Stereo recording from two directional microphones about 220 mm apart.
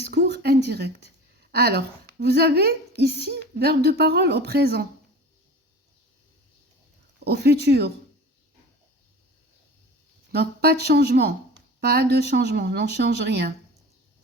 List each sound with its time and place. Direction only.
0.1 s a sound: 45° right (ahead or behind)
1.5 s speech: 45° right (ahead or behind)
7.3 s speech: 45° right (ahead or behind)
10.3 s speech: 45° right (ahead or behind)